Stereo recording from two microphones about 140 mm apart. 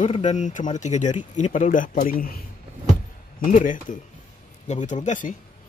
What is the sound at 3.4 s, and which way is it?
Speech, 70° left (ahead or behind).